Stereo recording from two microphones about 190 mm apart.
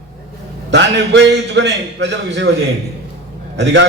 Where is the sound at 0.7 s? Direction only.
70° right (ahead or behind).